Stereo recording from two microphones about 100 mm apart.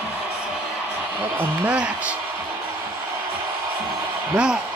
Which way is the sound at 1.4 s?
15° right (ahead or behind).